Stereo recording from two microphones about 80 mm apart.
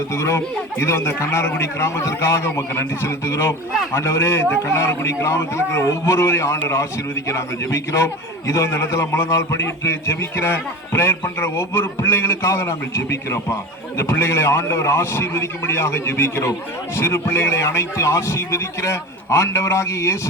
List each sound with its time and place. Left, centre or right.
0.1 s a man's voice: left